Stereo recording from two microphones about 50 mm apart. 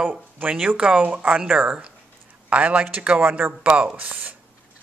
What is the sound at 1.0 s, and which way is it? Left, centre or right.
Speech, right.